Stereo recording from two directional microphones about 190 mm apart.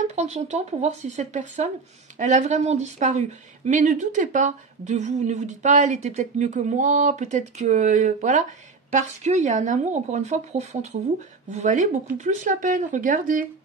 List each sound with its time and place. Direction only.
0.0 s speech: 35° right (ahead or behind)